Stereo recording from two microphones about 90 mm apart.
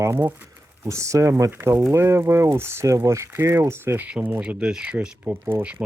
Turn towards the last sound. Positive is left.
turn(degrees=-15)  # may be behind; listen again after turning